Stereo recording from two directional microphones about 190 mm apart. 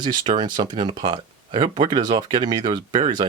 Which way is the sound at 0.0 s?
25° right (ahead or behind).